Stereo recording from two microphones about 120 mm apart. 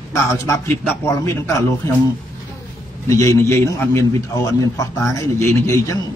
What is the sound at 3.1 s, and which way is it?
A man's voice, 25° left (ahead or behind).